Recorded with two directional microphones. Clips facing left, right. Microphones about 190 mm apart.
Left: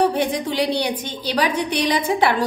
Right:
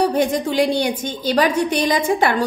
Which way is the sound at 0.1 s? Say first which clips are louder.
Right 3 dB; 45° right (ahead or behind).